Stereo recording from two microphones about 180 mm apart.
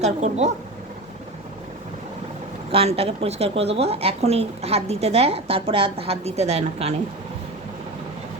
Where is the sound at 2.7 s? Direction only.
35° right (ahead or behind).